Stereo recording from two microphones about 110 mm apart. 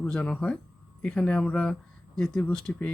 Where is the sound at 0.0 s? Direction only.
10° left (ahead or behind).